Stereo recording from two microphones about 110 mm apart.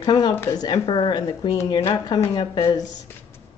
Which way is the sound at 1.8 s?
30° left (ahead or behind).